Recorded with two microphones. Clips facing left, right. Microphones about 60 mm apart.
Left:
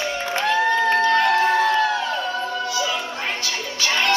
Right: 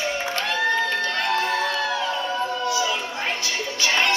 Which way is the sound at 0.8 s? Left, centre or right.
Left.